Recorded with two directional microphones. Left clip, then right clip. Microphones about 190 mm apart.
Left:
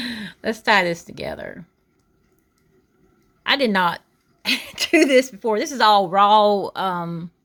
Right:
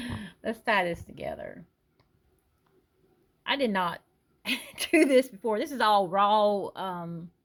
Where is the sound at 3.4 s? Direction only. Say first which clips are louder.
Left 9 dB; 20° left (ahead or behind).